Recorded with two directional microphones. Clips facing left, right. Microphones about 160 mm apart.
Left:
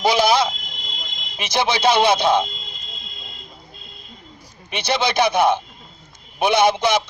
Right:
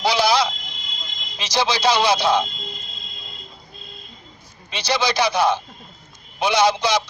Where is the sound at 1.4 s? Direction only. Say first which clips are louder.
Left 1 dB; 55° left (ahead or behind).